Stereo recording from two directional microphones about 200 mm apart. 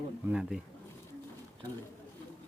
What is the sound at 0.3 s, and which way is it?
Speech, 5° right (ahead or behind).